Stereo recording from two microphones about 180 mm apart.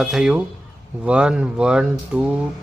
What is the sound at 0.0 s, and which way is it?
Speech, 5° right (ahead or behind).